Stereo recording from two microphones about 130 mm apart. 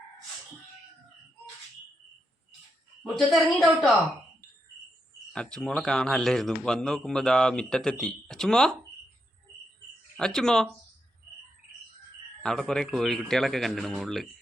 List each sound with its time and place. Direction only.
3.0 s speech: centre (ahead or behind)
5.3 s speech: 5° left (ahead or behind)
10.2 s speech: 5° left (ahead or behind)
12.4 s speech: 5° left (ahead or behind)